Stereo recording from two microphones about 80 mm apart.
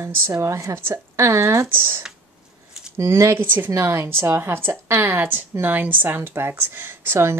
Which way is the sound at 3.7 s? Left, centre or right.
Right.